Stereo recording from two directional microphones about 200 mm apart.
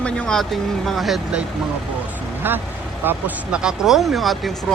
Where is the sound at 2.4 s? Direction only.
10° right (ahead or behind).